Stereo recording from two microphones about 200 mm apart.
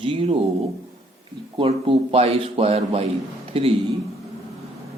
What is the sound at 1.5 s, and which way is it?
A man's voice, 30° right (ahead or behind).